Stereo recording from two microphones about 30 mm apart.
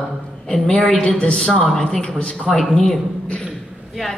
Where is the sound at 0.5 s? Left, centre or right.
Left.